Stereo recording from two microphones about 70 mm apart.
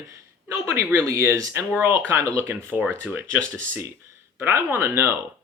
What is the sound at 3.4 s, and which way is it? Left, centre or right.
Speech, centre.